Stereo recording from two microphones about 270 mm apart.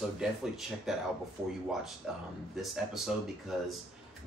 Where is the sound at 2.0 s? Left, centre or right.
Centre.